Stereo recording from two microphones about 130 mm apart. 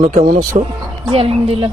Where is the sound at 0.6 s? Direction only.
60° right (ahead or behind).